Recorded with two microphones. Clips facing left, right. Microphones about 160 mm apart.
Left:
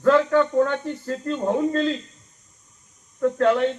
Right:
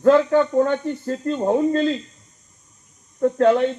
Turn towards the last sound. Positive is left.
turn(degrees=-30)  # may be behind; listen again after turning